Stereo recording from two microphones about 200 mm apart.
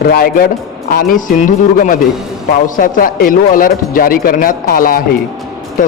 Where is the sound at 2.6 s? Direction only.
40° left (ahead or behind).